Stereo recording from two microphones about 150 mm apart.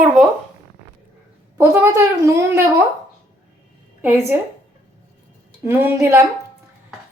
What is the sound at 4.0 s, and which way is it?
Speech, 15° right (ahead or behind).